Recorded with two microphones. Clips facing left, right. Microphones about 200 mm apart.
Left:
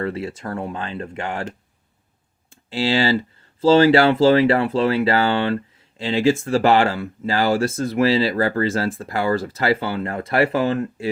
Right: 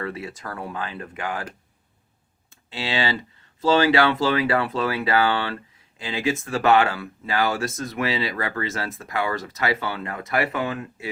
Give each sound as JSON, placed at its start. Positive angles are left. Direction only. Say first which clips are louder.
{"t": 0.0, "sound": "speech", "louder": "left 6 dB", "side_deg": 30}
{"t": 2.5, "sound": "speech", "louder": "left 8 dB", "side_deg": 30}